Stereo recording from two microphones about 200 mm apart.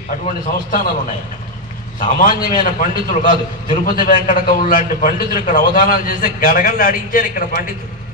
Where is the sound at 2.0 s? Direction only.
45° left (ahead or behind).